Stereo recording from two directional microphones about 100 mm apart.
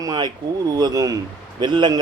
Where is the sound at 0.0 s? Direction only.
40° right (ahead or behind).